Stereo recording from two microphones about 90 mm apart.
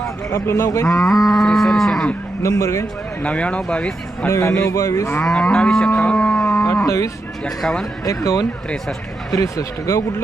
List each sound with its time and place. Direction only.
0.3 s a man's voice: 30° left (ahead or behind)
0.9 s moo: 5° left (ahead or behind)
2.4 s a man's voice: 35° left (ahead or behind)
3.2 s speech: 15° left (ahead or behind)
4.3 s a man's voice: 30° left (ahead or behind)
5.2 s livestock: 5° left (ahead or behind)
6.8 s speech: 35° left (ahead or behind)
7.4 s moo: 5° left (ahead or behind)
8.0 s a man's voice: 40° left (ahead or behind)